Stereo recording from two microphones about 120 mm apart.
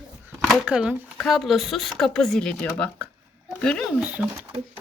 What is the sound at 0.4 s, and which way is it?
A woman's voice, centre (ahead or behind).